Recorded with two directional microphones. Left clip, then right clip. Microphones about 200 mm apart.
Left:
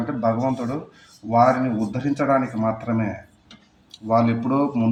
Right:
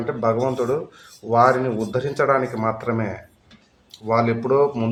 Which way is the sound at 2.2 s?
30° right (ahead or behind).